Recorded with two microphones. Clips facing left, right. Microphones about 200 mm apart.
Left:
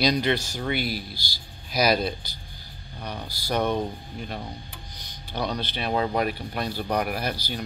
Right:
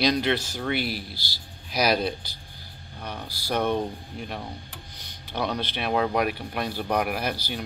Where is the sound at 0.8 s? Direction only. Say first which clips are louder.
Even; 45° left (ahead or behind).